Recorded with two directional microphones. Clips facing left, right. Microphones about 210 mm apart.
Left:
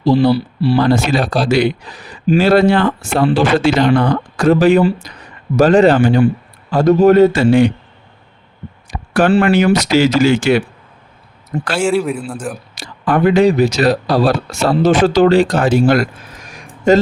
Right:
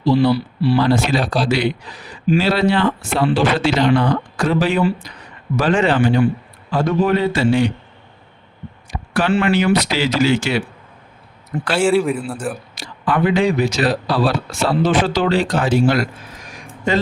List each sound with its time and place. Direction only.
0.0 s speech: 45° left (ahead or behind)
0.3 s speech: 30° left (ahead or behind)
0.8 s speech: 45° left (ahead or behind)
8.9 s a sound: 45° left (ahead or behind)
9.4 s speech: 50° left (ahead or behind)
11.8 s a man's voice: centre (ahead or behind)
12.7 s speech: 45° left (ahead or behind)